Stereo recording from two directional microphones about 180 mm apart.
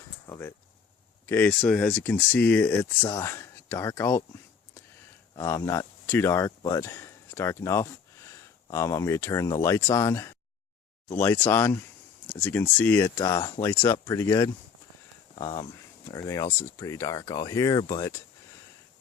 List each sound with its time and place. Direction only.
0.3 s a sound: 15° left (ahead or behind)
1.3 s speech: 10° left (ahead or behind)
5.3 s speech: 20° left (ahead or behind)